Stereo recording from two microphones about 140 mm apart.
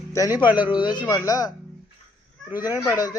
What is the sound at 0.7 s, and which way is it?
Speech, 35° left (ahead or behind).